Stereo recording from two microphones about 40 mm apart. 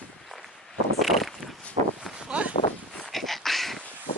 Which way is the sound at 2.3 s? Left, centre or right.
Right.